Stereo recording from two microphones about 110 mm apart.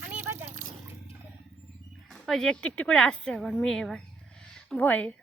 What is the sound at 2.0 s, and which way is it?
A woman's voice, centre (ahead or behind).